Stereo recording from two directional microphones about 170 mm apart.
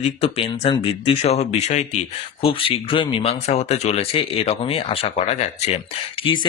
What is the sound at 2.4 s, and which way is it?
Speech, 30° left (ahead or behind).